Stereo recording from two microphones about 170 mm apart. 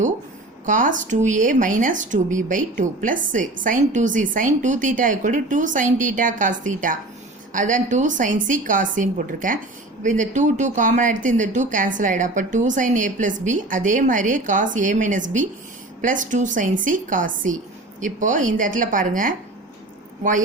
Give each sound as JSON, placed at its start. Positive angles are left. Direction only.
{"t": 0.6, "sound": "a woman's voice", "side_deg": -50}